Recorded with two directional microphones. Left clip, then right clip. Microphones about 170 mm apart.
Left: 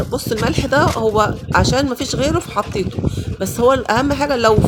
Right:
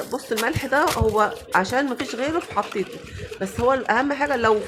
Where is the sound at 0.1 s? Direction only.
30° left (ahead or behind).